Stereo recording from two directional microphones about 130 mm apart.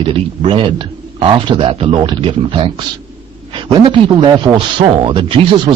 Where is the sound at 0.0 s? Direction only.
40° right (ahead or behind).